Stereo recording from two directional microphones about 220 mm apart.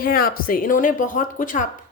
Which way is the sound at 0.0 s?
40° left (ahead or behind).